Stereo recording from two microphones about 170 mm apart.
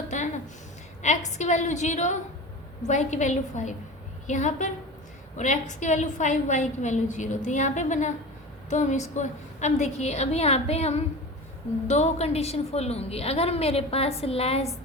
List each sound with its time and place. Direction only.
1.0 s a woman's voice: 45° left (ahead or behind)